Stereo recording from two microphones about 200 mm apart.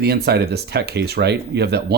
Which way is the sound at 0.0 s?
55° right (ahead or behind).